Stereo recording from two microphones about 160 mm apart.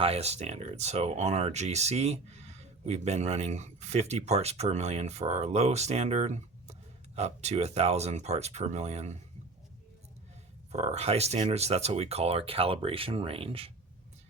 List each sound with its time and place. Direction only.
0.0 s speech: 40° right (ahead or behind)
10.7 s speech: 45° right (ahead or behind)